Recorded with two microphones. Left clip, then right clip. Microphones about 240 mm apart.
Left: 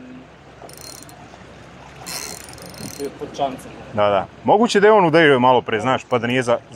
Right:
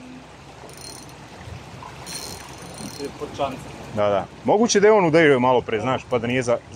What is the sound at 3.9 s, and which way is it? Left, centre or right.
Speech, centre.